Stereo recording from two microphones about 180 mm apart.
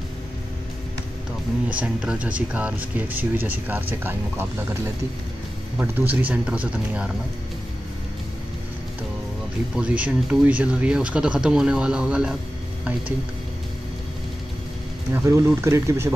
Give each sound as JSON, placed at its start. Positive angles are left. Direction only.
{"t": 1.7, "sound": "speech", "side_deg": -5}
{"t": 5.8, "sound": "speech", "side_deg": -10}
{"t": 9.8, "sound": "speech", "side_deg": -5}
{"t": 15.1, "sound": "speech", "side_deg": -15}